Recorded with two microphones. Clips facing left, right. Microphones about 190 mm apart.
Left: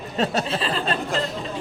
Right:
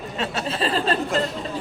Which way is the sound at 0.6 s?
35° right (ahead or behind).